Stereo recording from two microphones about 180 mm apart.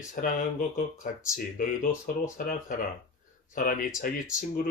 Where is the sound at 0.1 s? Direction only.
45° left (ahead or behind).